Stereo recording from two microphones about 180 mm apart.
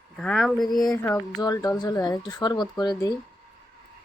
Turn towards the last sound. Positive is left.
turn(degrees=20)  # may be behind; listen again after turning